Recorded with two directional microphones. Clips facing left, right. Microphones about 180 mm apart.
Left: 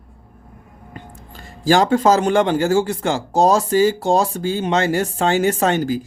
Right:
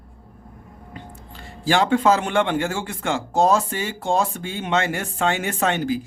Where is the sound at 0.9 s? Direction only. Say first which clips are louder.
Left 2 dB; 45° left (ahead or behind).